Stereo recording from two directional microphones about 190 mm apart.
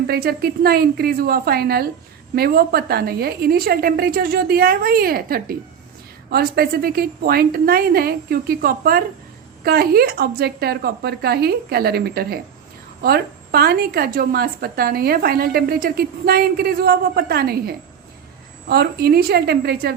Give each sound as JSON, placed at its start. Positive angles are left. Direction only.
{"t": 0.1, "sound": "a woman's voice", "side_deg": -55}